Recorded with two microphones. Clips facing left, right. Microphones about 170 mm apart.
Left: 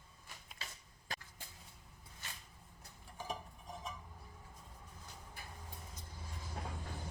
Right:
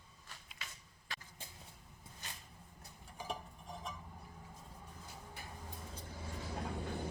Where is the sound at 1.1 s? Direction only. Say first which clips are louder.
Left 3 dB; 40° left (ahead or behind).